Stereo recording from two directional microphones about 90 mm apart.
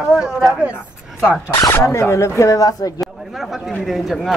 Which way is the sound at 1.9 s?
30° left (ahead or behind).